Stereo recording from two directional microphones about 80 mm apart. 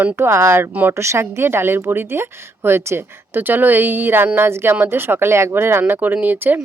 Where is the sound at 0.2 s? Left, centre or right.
Right.